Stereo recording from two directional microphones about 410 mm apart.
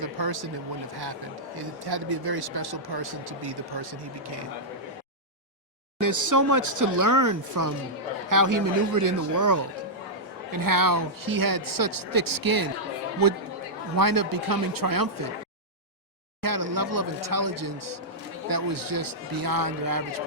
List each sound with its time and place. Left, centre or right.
0.0 s a sound: right
1.5 s speech: right
6.0 s speech: right
13.9 s speech: right
16.4 s speech: right